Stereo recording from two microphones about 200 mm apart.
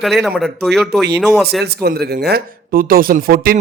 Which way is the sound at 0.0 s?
Centre (ahead or behind).